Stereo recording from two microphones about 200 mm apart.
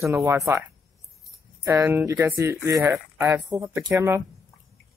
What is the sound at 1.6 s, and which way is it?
Speech, 15° right (ahead or behind).